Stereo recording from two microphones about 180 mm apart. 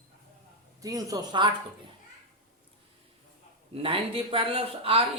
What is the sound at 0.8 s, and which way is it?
Speech, 20° right (ahead or behind).